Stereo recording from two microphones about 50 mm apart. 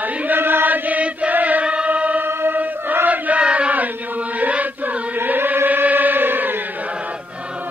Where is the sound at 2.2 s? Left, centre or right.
Right.